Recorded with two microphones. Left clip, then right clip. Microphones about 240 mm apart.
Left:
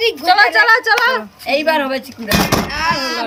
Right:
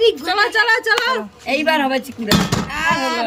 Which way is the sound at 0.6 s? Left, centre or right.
Centre.